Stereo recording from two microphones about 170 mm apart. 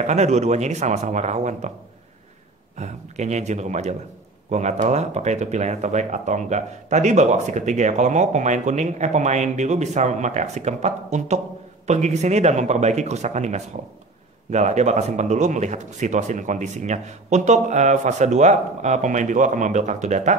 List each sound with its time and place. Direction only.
0.0 s a man's voice: 40° right (ahead or behind)
2.8 s speech: 45° right (ahead or behind)